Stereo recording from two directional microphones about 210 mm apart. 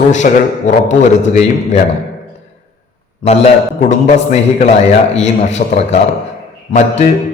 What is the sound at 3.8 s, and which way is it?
A man's voice, 35° left (ahead or behind).